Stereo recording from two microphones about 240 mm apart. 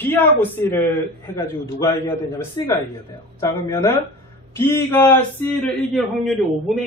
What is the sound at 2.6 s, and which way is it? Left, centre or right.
A man's voice, centre.